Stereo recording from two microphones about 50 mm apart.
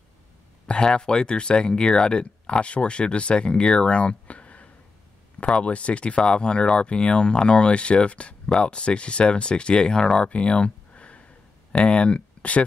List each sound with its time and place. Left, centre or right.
0.7 s speech: centre